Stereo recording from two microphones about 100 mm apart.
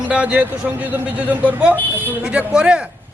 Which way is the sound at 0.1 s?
10° right (ahead or behind).